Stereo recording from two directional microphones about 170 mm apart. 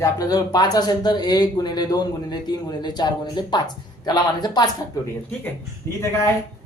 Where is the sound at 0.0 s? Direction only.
20° left (ahead or behind).